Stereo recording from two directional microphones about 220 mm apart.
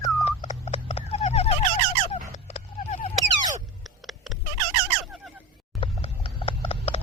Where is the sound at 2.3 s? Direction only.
30° left (ahead or behind).